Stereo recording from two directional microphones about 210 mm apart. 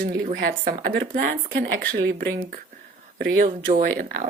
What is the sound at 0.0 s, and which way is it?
Speech, 45° right (ahead or behind).